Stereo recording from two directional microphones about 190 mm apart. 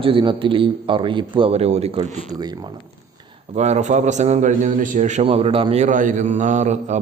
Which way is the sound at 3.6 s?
35° right (ahead or behind).